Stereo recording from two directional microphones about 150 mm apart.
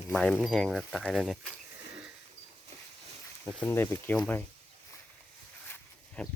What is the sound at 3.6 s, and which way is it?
Speech, 15° left (ahead or behind).